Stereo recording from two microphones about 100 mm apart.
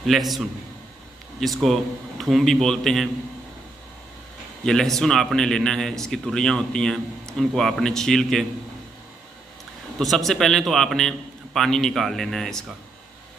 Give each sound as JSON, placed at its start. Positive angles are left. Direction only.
{"t": 0.0, "sound": "a man's voice", "side_deg": 0}
{"t": 4.6, "sound": "a man's voice", "side_deg": 5}
{"t": 9.9, "sound": "a man's voice", "side_deg": 5}